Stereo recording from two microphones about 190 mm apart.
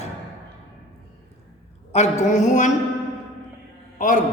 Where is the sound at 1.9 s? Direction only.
35° left (ahead or behind).